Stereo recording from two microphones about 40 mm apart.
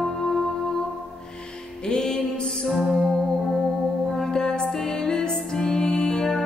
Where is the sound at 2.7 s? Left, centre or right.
Centre.